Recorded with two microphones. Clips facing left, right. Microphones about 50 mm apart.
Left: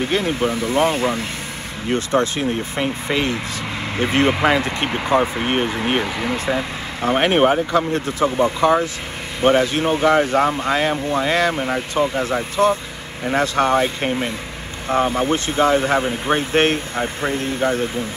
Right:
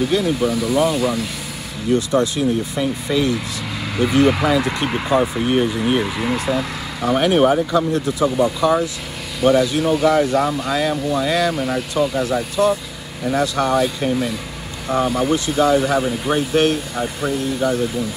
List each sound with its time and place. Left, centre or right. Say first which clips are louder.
0.0 s speech: right 2 dB; left